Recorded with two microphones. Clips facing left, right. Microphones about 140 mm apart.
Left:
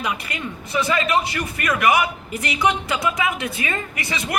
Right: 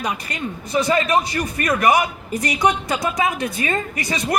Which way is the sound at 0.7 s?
40° right (ahead or behind).